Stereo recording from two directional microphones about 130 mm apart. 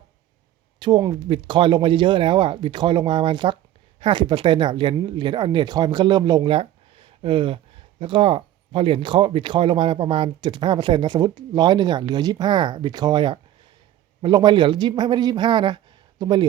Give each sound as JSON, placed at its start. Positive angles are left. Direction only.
{"t": 0.8, "sound": "speech", "side_deg": -35}